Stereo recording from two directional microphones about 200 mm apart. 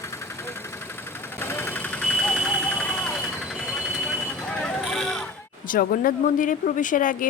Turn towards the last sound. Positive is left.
turn(degrees=40)  # may be behind; listen again after turning